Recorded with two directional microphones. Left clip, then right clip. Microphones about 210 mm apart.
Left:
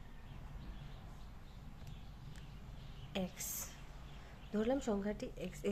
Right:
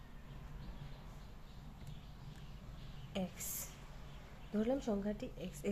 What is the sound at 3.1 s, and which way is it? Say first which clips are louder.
Speech: left 1 dB; 10° left (ahead or behind).